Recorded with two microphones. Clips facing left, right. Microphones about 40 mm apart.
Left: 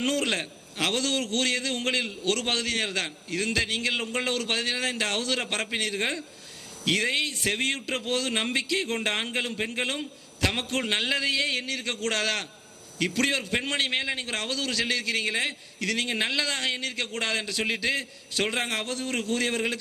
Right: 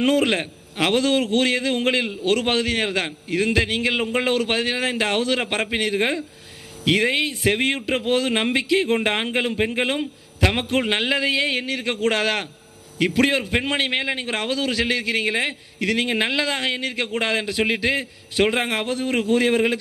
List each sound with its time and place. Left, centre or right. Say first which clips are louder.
0.0 s a man's voice: right 8 dB; centre